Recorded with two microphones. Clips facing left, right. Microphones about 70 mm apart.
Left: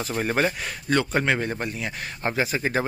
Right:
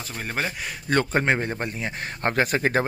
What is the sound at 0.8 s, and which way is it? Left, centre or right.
Speech, right.